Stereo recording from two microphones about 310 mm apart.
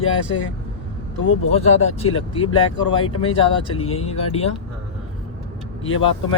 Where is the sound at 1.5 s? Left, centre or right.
Left.